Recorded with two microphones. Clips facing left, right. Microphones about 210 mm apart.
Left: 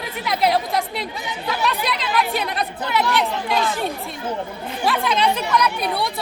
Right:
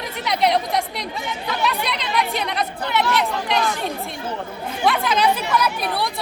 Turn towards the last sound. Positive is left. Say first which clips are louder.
# left 1 dB
turn(degrees=0)  # may be behind; listen again after turning